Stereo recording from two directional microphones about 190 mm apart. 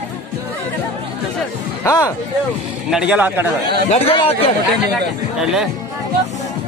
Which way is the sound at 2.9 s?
5° right (ahead or behind).